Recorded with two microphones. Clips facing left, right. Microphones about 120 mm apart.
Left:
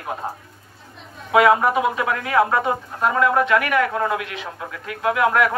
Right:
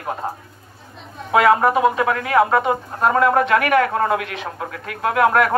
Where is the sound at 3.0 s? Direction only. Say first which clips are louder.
Right 2 dB; 50° right (ahead or behind).